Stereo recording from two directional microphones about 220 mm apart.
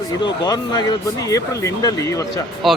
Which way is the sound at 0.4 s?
20° left (ahead or behind).